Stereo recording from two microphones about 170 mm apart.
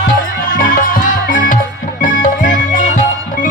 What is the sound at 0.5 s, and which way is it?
Music, 55° left (ahead or behind).